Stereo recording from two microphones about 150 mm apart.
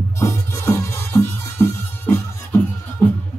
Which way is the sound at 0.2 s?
15° left (ahead or behind).